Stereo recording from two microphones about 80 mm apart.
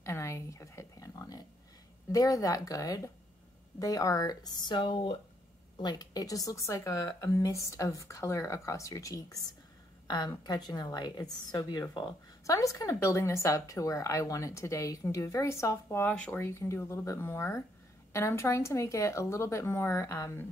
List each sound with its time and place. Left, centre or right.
0.0 s a sound: left
2.1 s speech: left
5.8 s a woman's voice: left
10.0 s a woman's voice: left
16.0 s a woman's voice: left